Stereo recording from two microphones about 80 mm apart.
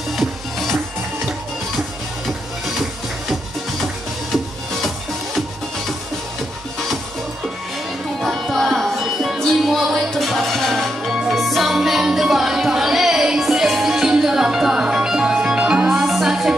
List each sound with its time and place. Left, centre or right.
0.1 s music: centre
8.2 s music: centre